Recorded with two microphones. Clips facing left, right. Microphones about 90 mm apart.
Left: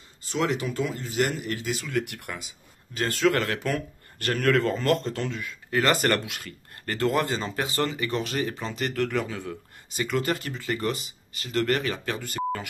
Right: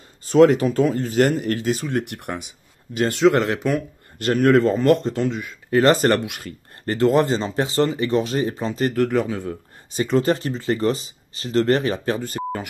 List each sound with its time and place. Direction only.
0.3 s speech: 40° right (ahead or behind)
2.0 s speech: 25° right (ahead or behind)